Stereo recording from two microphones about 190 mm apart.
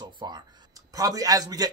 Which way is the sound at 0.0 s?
20° right (ahead or behind).